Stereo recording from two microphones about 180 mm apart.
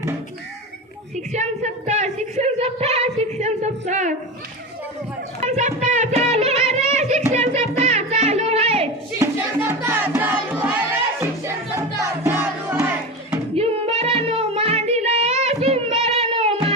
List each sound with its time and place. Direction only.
1.1 s a sound: 40° right (ahead or behind)
5.4 s music: 40° right (ahead or behind)
9.1 s music: 15° right (ahead or behind)
13.6 s music: 35° right (ahead or behind)